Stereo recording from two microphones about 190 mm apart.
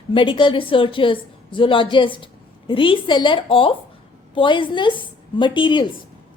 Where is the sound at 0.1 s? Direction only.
25° left (ahead or behind).